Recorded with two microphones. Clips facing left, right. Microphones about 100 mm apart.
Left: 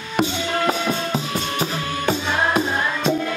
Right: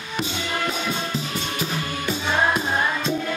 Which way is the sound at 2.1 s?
50° left (ahead or behind).